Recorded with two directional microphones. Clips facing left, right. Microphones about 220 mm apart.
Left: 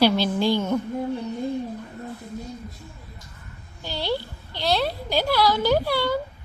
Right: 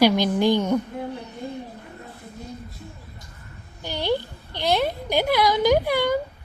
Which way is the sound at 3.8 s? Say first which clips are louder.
Right 3 dB; 15° right (ahead or behind).